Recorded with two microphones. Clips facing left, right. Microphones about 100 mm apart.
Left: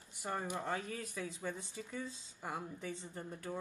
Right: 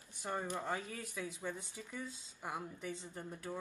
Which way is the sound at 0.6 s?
10° right (ahead or behind).